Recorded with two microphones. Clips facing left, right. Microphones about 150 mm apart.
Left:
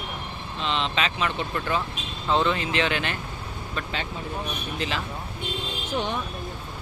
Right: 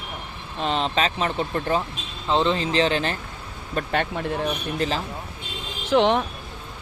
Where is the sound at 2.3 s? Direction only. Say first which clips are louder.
Right 2 dB; 25° right (ahead or behind).